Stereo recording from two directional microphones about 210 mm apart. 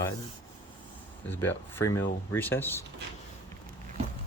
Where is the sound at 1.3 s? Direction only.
10° left (ahead or behind).